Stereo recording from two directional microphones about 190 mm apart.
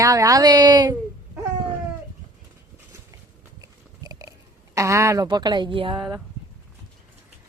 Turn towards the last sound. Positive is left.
turn(degrees=-25)  # may be behind; listen again after turning